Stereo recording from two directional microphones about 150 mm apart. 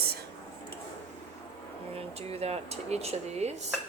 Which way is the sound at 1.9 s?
40° right (ahead or behind).